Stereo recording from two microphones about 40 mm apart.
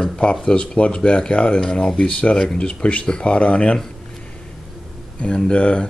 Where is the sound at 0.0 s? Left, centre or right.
Centre.